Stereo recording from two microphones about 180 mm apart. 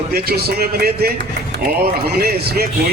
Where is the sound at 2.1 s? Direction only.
60° right (ahead or behind).